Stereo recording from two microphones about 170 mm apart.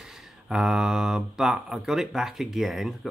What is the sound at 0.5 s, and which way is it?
Speech, 5° right (ahead or behind).